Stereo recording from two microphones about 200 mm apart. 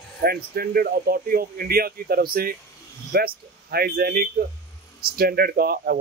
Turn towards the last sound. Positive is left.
turn(degrees=-50)  # may be behind; listen again after turning